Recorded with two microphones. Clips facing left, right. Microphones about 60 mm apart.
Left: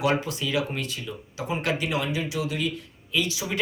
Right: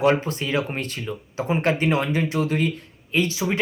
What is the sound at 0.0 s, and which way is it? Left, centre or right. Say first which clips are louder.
Speech: right 5 dB; right.